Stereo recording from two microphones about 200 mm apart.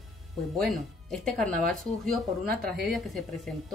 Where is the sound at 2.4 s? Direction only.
50° right (ahead or behind).